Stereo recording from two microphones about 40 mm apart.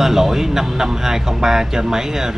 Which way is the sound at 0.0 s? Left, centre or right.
Centre.